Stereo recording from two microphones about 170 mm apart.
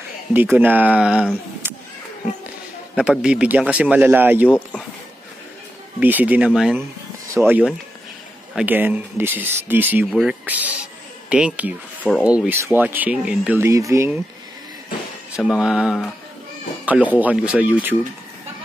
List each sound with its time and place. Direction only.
0.3 s speech: 10° right (ahead or behind)
3.0 s speech: 5° right (ahead or behind)
4.5 s speech: 10° left (ahead or behind)
5.9 s speech: 10° right (ahead or behind)
15.3 s speech: 5° right (ahead or behind)